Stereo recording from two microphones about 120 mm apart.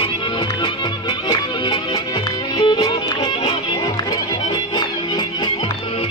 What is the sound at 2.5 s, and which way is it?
Music, 35° left (ahead or behind).